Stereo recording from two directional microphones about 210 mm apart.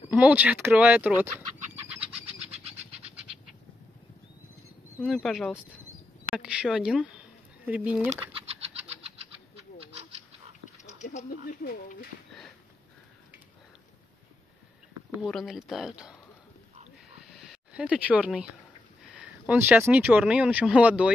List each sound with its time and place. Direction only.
0.1 s speech: 5° right (ahead or behind)
2.5 s a sound: 30° right (ahead or behind)
5.0 s speech: centre (ahead or behind)
10.8 s speech: 35° left (ahead or behind)
15.1 s speech: centre (ahead or behind)
17.3 s a sound: centre (ahead or behind)
19.1 s speech: 5° right (ahead or behind)